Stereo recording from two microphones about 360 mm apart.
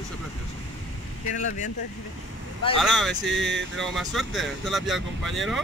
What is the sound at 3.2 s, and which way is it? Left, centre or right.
Speech, right.